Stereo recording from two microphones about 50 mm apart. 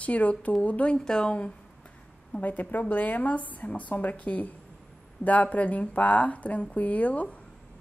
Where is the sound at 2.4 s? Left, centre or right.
Left.